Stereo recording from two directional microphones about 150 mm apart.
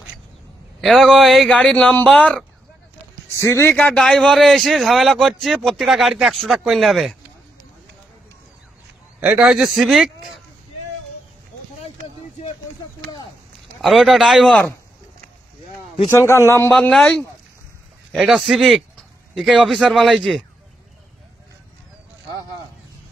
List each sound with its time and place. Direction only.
0.7 s a man's voice: centre (ahead or behind)
3.4 s a man's voice: 15° left (ahead or behind); by 7.2 s centre (ahead or behind)
9.2 s a man's voice: 5° right (ahead or behind)
13.7 s a man's voice: centre (ahead or behind)
16.1 s a man's voice: 15° left (ahead or behind)
16.7 s a man's voice: 5° left (ahead or behind)
18.1 s speech: centre (ahead or behind)